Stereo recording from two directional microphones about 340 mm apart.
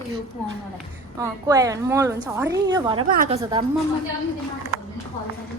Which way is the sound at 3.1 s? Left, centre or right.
Right.